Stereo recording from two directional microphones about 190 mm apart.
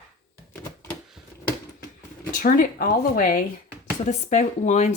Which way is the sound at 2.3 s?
45° left (ahead or behind).